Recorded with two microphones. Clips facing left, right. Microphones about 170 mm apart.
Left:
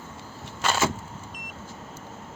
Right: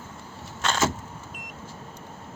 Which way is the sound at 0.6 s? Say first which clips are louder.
Even; 5° left (ahead or behind).